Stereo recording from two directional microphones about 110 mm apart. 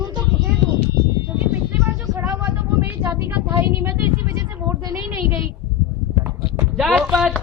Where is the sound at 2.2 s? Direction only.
20° right (ahead or behind).